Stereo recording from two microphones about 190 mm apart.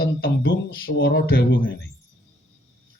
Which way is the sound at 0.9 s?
70° left (ahead or behind).